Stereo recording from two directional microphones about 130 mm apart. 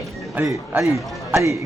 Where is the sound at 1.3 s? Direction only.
20° right (ahead or behind).